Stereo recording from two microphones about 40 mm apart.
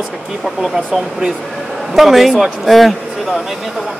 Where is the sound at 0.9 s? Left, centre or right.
Centre.